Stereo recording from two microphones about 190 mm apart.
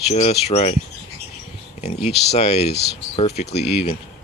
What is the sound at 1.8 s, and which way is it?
Speech, 35° left (ahead or behind).